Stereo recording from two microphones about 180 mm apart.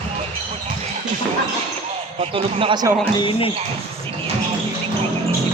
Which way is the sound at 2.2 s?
30° right (ahead or behind).